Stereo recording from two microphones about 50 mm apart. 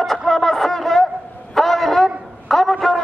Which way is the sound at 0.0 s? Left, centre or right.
Centre.